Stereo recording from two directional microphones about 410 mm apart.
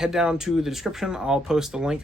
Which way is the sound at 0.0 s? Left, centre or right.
Centre.